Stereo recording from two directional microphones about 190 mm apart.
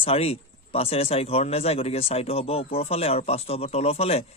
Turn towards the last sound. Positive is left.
turn(degrees=30)  # may be behind; listen again after turning